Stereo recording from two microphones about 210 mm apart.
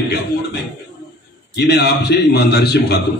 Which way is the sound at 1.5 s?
50° left (ahead or behind).